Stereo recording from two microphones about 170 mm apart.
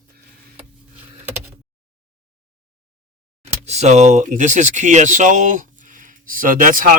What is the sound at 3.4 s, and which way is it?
Speech, 40° right (ahead or behind).